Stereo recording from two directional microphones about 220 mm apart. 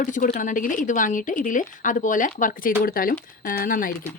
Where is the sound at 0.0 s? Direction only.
35° left (ahead or behind).